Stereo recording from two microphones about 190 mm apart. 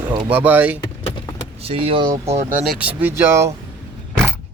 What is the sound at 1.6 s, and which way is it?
Speech, 30° right (ahead or behind).